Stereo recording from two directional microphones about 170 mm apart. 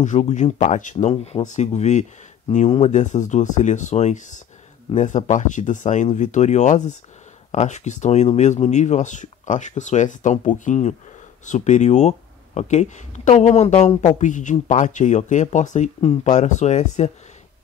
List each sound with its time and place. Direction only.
0.0 s speech: 45° left (ahead or behind)
0.9 s speech: 35° left (ahead or behind)